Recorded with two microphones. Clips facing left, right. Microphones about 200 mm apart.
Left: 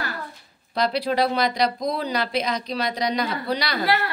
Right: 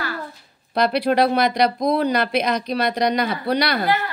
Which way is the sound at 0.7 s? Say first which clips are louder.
Right 4 dB; 60° right (ahead or behind).